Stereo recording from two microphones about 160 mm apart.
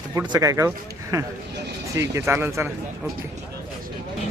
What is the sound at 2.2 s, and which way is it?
Speech, 15° right (ahead or behind).